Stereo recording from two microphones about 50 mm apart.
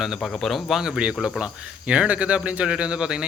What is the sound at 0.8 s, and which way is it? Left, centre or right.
Speech, centre.